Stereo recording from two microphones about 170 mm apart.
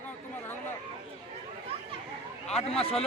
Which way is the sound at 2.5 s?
40° left (ahead or behind).